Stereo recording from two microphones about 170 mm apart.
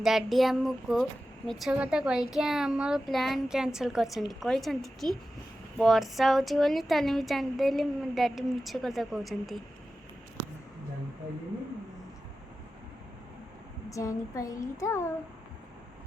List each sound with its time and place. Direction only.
0.0 s speech: centre (ahead or behind)
13.9 s speech: 20° left (ahead or behind)